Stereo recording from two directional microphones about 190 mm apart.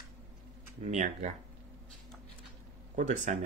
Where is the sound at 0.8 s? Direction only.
40° right (ahead or behind).